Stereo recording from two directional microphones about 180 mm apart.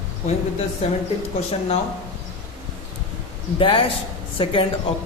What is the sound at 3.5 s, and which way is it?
A man's voice, 30° left (ahead or behind).